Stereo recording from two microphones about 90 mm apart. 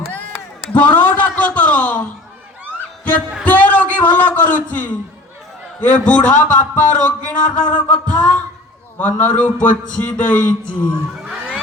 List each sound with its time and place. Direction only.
0.7 s a man's voice: 20° left (ahead or behind)
1.4 s a sound: 15° left (ahead or behind)
3.4 s a man's voice: 15° left (ahead or behind)